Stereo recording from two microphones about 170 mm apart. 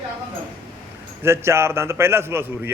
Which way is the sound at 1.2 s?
15° right (ahead or behind).